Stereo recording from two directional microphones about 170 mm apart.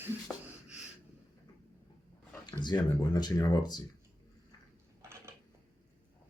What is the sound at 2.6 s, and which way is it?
Speech, 25° left (ahead or behind).